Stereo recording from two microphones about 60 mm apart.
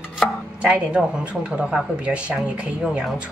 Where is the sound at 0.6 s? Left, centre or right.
Centre.